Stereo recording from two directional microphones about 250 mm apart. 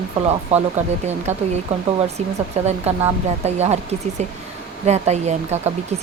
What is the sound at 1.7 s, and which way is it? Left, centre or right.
Speech, right.